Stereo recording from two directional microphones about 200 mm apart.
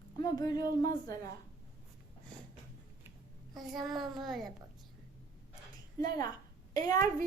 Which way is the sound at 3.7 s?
Centre (ahead or behind).